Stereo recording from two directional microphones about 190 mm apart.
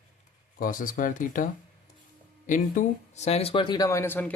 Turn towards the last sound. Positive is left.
turn(degrees=10)  # may be behind; listen again after turning